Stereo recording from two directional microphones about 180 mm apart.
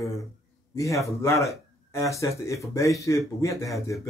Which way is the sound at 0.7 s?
20° left (ahead or behind).